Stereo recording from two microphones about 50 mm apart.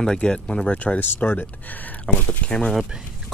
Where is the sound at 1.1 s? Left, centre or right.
Left.